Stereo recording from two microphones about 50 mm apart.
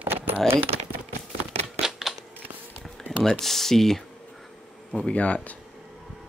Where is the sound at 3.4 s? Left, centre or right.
Centre.